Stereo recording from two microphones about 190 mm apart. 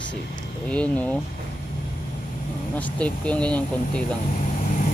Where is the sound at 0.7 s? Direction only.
5° left (ahead or behind).